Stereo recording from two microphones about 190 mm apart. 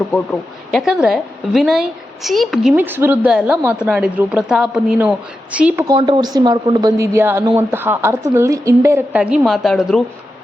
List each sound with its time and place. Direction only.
0.7 s a woman's voice: centre (ahead or behind)
5.9 s a woman's voice: 25° right (ahead or behind); by 10.0 s centre (ahead or behind)